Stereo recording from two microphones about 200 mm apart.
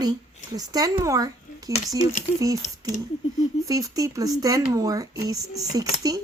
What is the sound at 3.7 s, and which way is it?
Speech, 15° right (ahead or behind).